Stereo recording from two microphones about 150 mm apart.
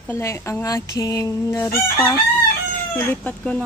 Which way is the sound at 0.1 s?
20° left (ahead or behind).